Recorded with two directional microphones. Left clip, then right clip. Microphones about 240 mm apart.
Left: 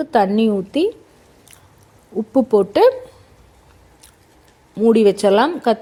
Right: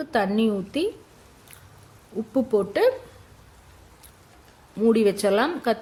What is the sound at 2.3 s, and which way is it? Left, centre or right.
Speech, centre.